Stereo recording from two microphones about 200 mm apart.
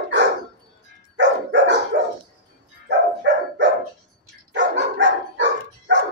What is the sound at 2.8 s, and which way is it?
Dog, 60° right (ahead or behind).